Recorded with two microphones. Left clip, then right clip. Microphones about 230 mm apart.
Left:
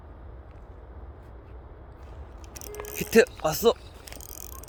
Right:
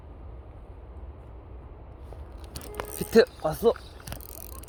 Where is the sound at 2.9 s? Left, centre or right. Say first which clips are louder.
Even; centre.